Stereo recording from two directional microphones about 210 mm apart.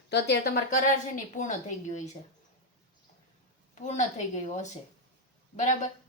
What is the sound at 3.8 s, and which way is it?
A woman's voice, 35° left (ahead or behind).